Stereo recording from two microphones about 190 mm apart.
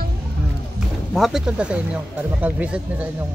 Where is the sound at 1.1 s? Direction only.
Centre (ahead or behind).